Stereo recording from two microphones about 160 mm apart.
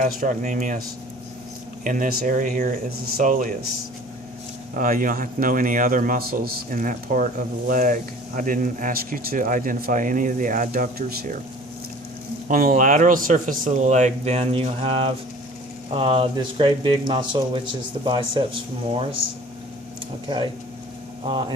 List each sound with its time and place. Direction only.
0.0 s speech: 55° right (ahead or behind)
1.8 s speech: 55° right (ahead or behind)
4.7 s speech: 60° right (ahead or behind)
12.5 s speech: 60° right (ahead or behind); by 19.0 s 35° right (ahead or behind)
21.2 s speech: 30° right (ahead or behind)